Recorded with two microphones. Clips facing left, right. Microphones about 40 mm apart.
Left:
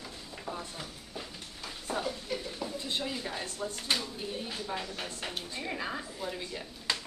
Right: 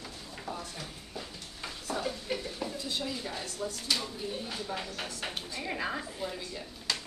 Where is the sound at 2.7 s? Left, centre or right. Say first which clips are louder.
Left 3 dB; left.